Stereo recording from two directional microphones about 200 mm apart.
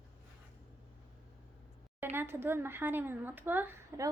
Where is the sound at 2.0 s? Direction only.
10° right (ahead or behind).